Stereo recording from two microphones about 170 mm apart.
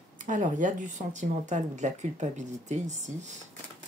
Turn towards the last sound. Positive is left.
turn(degrees=-45)  # may be behind; listen again after turning